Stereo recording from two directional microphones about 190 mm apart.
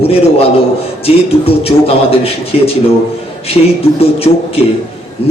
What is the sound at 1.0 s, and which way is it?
A man's voice, 30° left (ahead or behind).